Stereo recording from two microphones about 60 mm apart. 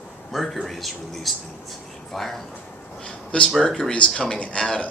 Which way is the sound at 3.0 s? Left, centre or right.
Centre.